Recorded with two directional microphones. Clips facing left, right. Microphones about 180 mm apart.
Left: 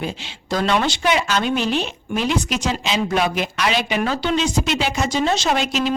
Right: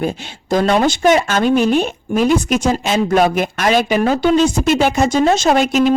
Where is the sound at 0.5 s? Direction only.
45° right (ahead or behind).